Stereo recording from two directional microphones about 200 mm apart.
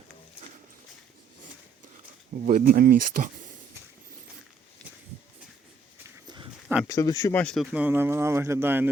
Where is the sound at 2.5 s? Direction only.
45° right (ahead or behind).